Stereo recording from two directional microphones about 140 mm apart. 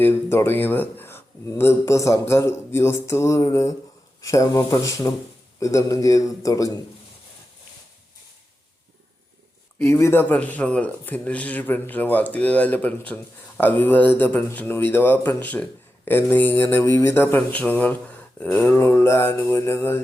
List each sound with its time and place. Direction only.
0.0 s speech: 15° left (ahead or behind)
9.7 s speech: 15° left (ahead or behind)